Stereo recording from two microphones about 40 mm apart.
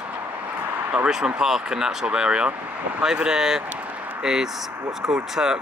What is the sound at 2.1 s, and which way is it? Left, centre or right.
Speech, right.